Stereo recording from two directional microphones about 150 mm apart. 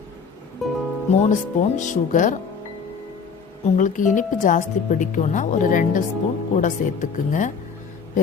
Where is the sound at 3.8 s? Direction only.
60° left (ahead or behind).